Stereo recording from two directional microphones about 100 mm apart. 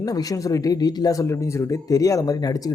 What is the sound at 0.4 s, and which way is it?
Speech, 35° left (ahead or behind).